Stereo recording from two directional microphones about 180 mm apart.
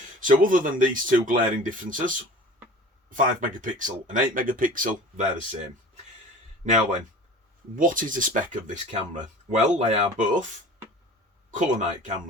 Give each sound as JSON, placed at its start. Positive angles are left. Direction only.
{"t": 0.2, "sound": "speech", "side_deg": -50}
{"t": 7.8, "sound": "speech", "side_deg": -50}
{"t": 11.5, "sound": "speech", "side_deg": -45}